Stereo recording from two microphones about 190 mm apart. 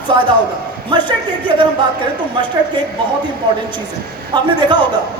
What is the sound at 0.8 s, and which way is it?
Speech, 25° right (ahead or behind).